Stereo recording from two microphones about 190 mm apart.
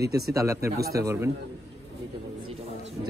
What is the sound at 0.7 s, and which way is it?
Speech, 55° right (ahead or behind).